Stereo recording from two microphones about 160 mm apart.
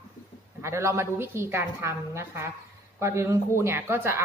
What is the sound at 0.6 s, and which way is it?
A woman's voice, 15° right (ahead or behind).